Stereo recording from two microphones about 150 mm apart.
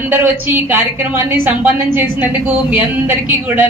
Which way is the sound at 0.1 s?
15° right (ahead or behind).